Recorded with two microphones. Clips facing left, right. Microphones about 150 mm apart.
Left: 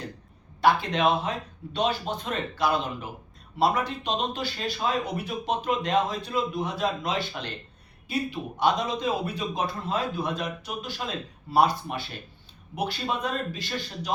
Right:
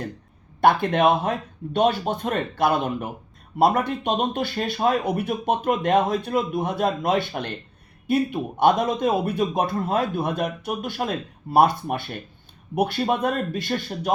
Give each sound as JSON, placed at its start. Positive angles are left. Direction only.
{"t": 0.6, "sound": "speech", "side_deg": -55}